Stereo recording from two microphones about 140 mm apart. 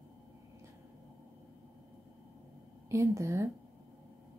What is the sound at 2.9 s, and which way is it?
Speech, 20° right (ahead or behind).